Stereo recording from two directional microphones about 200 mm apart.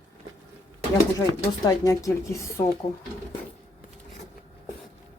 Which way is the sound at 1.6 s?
15° left (ahead or behind).